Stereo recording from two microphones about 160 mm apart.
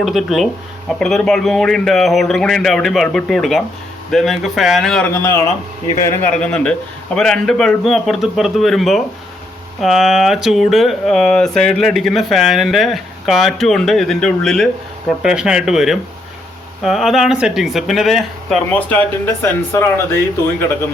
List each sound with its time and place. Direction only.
0.0 s speech: centre (ahead or behind)
5.1 s speech: 15° left (ahead or behind)